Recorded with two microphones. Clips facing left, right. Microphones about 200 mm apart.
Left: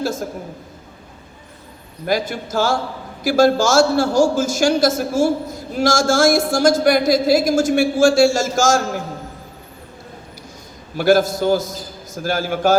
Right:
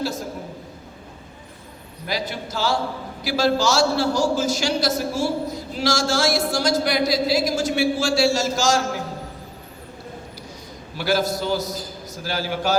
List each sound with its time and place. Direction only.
0.0 s a man's voice: 50° left (ahead or behind)
2.0 s a man's voice: 50° left (ahead or behind)
10.9 s a man's voice: 50° left (ahead or behind)